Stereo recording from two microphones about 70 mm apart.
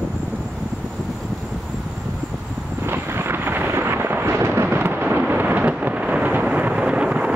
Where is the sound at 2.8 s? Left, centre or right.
Right.